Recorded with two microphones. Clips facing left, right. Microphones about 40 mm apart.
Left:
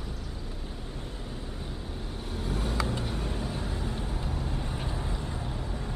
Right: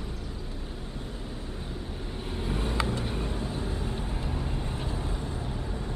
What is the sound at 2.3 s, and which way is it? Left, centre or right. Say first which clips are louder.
Vehicle: right 1 dB; centre.